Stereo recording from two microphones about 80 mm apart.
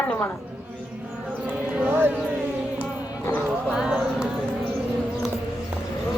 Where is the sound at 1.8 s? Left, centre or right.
Right.